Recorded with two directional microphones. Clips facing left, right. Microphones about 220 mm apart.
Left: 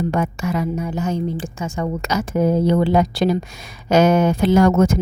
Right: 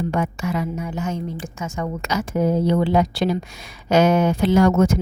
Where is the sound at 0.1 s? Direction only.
45° left (ahead or behind).